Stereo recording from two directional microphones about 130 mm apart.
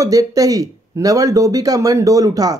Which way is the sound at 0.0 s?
25° right (ahead or behind).